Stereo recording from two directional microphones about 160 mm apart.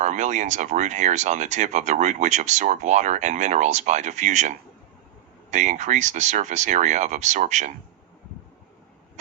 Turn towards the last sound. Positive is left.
turn(degrees=-50)  # may be behind; listen again after turning